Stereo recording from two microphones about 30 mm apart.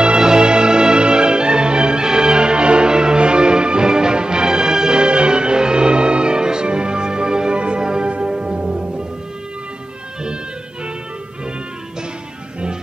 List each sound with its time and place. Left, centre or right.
0.0 s music: right